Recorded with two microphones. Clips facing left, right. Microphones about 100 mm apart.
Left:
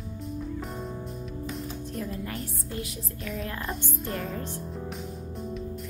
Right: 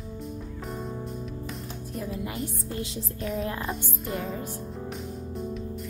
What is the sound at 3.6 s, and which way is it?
Speech, centre (ahead or behind).